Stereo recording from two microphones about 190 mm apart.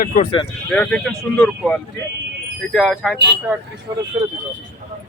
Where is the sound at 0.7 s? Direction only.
5° left (ahead or behind).